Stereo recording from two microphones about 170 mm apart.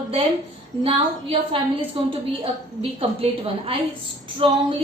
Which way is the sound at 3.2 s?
35° right (ahead or behind).